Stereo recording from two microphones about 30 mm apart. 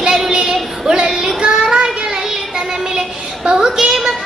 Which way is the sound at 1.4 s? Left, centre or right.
Right.